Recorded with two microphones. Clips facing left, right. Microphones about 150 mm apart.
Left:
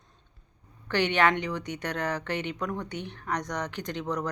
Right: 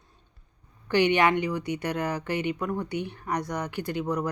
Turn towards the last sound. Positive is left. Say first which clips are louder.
# right 3 dB
turn(degrees=-10)  # may be behind; listen again after turning